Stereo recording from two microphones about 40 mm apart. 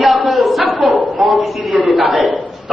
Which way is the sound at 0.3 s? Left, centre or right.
Centre.